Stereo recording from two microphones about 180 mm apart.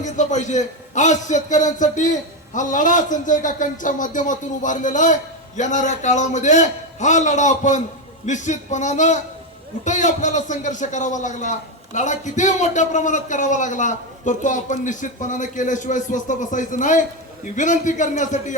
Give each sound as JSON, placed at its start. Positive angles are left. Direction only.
{"t": 0.0, "sound": "a man's voice", "side_deg": 40}